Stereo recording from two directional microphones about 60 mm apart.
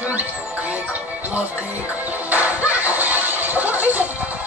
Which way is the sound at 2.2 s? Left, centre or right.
Right.